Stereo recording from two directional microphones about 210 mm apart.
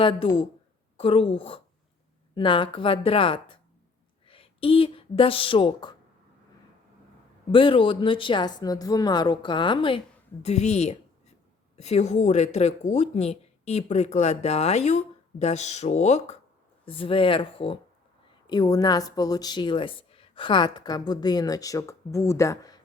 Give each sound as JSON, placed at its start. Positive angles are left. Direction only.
{"t": 0.0, "sound": "a woman's voice", "side_deg": 25}
{"t": 7.5, "sound": "a woman's voice", "side_deg": 25}